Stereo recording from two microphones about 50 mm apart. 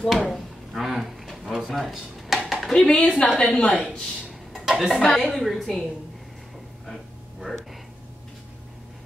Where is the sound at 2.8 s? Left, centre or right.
Left.